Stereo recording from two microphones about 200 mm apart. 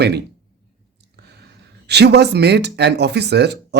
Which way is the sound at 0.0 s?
55° right (ahead or behind).